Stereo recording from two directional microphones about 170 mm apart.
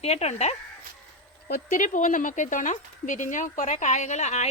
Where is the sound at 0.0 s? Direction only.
40° left (ahead or behind).